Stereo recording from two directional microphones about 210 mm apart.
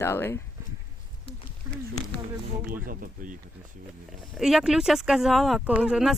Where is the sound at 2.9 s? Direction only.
40° right (ahead or behind).